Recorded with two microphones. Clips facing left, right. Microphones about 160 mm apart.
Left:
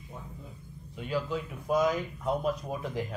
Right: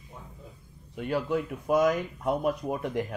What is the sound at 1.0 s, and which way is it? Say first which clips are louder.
Speech: right 4 dB; 60° right (ahead or behind).